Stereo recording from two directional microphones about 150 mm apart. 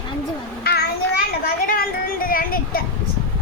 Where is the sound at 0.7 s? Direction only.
90° left.